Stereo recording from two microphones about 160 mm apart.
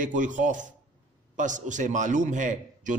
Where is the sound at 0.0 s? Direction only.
55° right (ahead or behind).